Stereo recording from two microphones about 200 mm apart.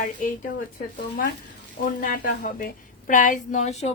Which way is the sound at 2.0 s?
45° left (ahead or behind).